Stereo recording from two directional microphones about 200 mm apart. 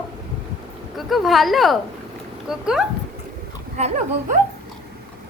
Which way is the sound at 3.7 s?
35° right (ahead or behind).